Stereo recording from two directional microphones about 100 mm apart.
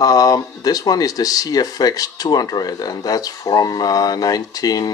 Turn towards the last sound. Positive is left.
turn(degrees=40)  # may be behind; listen again after turning